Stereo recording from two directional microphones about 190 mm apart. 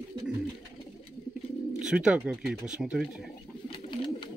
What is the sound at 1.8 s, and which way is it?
Speech, 5° right (ahead or behind).